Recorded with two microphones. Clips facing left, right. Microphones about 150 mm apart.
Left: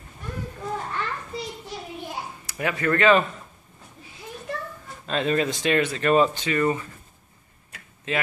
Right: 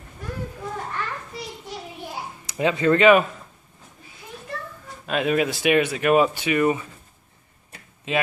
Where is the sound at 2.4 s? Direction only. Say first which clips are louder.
Right 6 dB; 20° right (ahead or behind).